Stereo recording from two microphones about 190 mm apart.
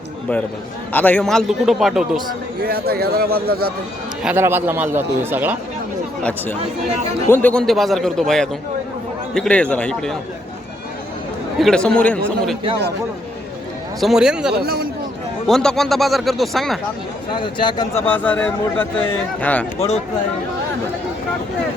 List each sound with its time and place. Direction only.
0.9 s a man's voice: 10° left (ahead or behind)
2.6 s a man's voice: 55° right (ahead or behind)
4.2 s a man's voice: 10° right (ahead or behind)
6.6 s speech: 35° right (ahead or behind)
7.3 s a man's voice: 10° left (ahead or behind)
11.6 s a man's voice: 5° left (ahead or behind)
14.0 s a man's voice: centre (ahead or behind)
14.5 s a man's voice: 55° right (ahead or behind)
15.4 s a man's voice: centre (ahead or behind)
17.3 s speech: 25° left (ahead or behind)
18.0 s a man's voice: 10° left (ahead or behind)